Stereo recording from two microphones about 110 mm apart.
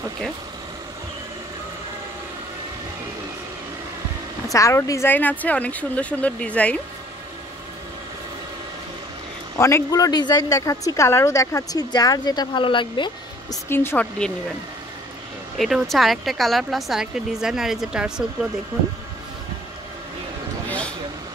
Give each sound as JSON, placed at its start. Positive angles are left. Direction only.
{"t": 4.5, "sound": "speech", "side_deg": 30}
{"t": 9.6, "sound": "speech", "side_deg": 25}
{"t": 9.9, "sound": "speech", "side_deg": 35}
{"t": 13.7, "sound": "speech", "side_deg": 20}
{"t": 15.5, "sound": "speech", "side_deg": 0}